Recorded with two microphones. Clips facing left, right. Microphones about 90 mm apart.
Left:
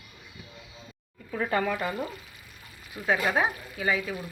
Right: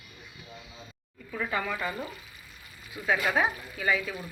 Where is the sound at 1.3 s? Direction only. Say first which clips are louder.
Left 4 dB; 45° left (ahead or behind).